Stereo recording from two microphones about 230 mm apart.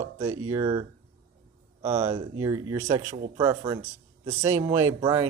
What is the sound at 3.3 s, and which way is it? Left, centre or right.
Speech, centre.